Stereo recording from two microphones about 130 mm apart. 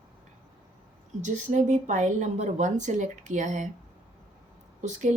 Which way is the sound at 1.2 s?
65° right (ahead or behind).